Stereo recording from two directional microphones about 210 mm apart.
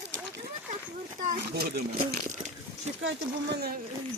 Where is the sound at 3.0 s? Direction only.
50° right (ahead or behind).